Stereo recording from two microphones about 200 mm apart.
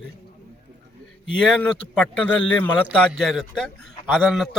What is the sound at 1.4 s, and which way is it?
A man's voice, 5° left (ahead or behind).